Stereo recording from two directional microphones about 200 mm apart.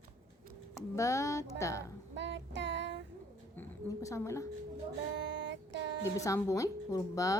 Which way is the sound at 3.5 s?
10° left (ahead or behind).